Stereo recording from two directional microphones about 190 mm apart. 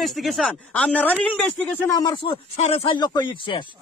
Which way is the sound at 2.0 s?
25° left (ahead or behind).